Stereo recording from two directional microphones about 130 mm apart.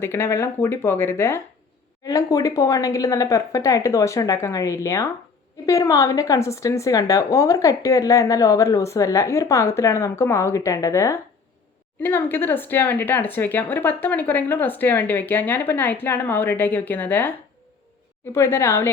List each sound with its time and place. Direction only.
0.0 s speech: 20° left (ahead or behind)